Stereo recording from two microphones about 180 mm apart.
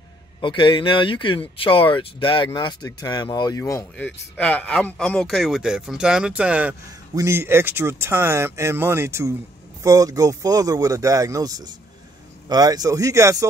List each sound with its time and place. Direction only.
0.4 s speech: 25° left (ahead or behind)
3.9 s a man's voice: 5° left (ahead or behind); by 13.5 s 15° right (ahead or behind)